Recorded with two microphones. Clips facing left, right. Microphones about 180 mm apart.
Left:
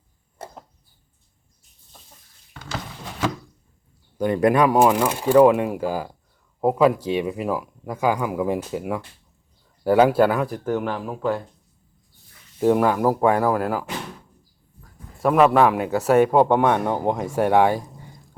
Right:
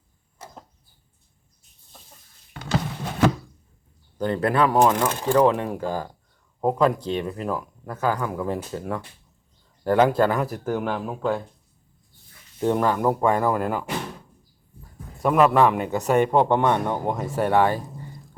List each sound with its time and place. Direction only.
0.4 s a sound: 55° left (ahead or behind)
4.2 s a man's voice: 15° left (ahead or behind)
10.4 s speech: 5° right (ahead or behind)
11.0 s speech: 5° left (ahead or behind)
12.5 s a man's voice: 10° left (ahead or behind)
15.2 s a man's voice: centre (ahead or behind)